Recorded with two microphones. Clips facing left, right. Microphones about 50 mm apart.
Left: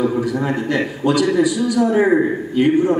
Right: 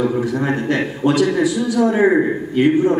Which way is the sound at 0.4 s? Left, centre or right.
Right.